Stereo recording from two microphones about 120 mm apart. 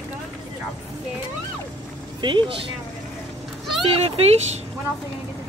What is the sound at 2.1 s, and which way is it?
Speech, 40° right (ahead or behind).